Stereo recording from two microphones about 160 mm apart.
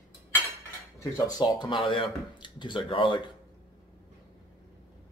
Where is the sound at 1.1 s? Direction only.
25° left (ahead or behind).